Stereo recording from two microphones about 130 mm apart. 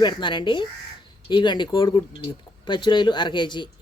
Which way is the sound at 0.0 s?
35° left (ahead or behind).